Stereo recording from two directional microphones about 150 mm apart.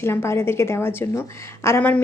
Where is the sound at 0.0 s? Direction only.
15° left (ahead or behind).